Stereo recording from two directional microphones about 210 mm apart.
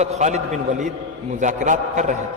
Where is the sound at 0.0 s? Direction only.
30° right (ahead or behind).